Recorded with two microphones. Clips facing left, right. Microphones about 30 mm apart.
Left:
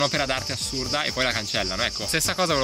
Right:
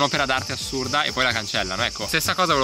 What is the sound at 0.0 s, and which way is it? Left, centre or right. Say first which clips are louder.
Speech: right 3 dB; centre.